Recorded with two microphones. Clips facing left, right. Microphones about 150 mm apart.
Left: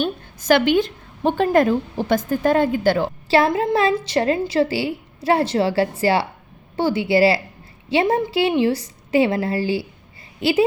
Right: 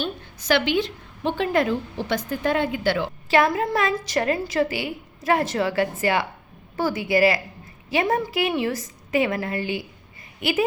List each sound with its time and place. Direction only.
0.0 s a woman's voice: 50° left (ahead or behind)
3.2 s a woman's voice: 30° left (ahead or behind)